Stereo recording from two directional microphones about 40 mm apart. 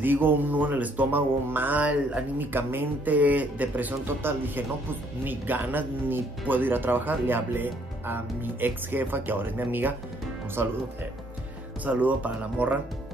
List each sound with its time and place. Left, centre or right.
0.0 s speech: right
1.5 s speech: right
1.8 s speech: right
2.3 s speech: right
3.1 s speech: right
4.2 s speech: right
10.6 s speech: right
11.8 s speech: right